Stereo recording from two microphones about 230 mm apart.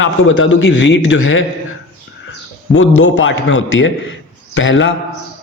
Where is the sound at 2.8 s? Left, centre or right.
Left.